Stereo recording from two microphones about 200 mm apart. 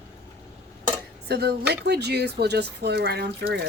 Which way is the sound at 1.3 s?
55° right (ahead or behind).